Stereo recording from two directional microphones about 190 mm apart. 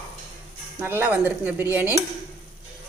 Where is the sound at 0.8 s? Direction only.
10° right (ahead or behind).